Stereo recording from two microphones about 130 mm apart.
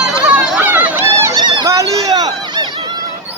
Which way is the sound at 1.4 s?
35° right (ahead or behind).